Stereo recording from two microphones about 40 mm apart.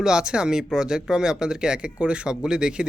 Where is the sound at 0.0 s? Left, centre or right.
Centre.